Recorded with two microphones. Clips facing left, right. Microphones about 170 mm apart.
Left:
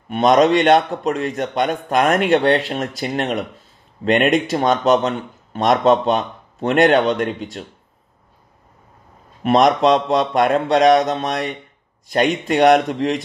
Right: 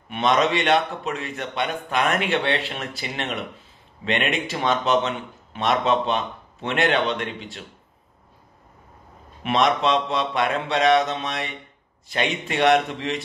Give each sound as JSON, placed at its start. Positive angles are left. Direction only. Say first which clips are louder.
{"t": 0.1, "sound": "a man's voice", "louder": "left 7 dB", "side_deg": 45}
{"t": 9.4, "sound": "a man's voice", "louder": "left 7 dB", "side_deg": 45}